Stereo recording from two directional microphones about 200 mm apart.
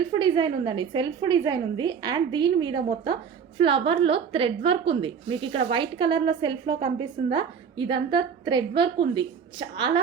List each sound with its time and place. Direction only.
0.1 s a woman's voice: 25° right (ahead or behind)